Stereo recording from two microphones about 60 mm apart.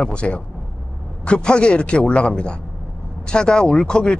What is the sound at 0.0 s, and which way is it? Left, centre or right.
Speech, centre.